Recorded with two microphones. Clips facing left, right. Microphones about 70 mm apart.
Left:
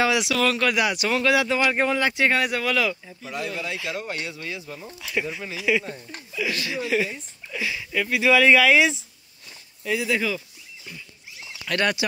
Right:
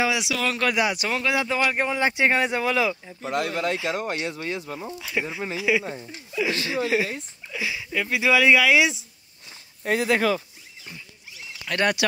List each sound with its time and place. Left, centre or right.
0.0 s speech: centre
0.6 s speech: right
1.7 s speech: centre
3.2 s speech: right
3.7 s speech: right
5.0 s speech: centre
5.4 s speech: right
7.5 s speech: centre
9.8 s speech: right
11.7 s speech: centre